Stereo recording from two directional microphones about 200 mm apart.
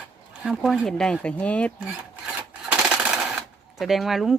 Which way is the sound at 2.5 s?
5° right (ahead or behind).